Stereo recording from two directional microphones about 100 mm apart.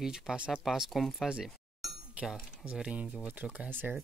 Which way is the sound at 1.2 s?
5° right (ahead or behind).